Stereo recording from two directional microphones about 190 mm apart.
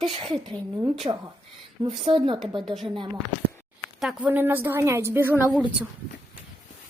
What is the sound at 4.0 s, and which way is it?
A woman's voice, 5° right (ahead or behind).